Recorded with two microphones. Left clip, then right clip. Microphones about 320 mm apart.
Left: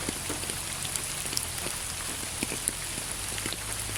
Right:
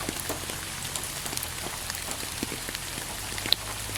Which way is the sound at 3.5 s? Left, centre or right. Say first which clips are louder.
Right 11 dB; right.